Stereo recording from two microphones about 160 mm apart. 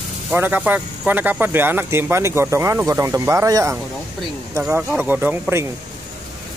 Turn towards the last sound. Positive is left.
turn(degrees=-15)  # may be behind; listen again after turning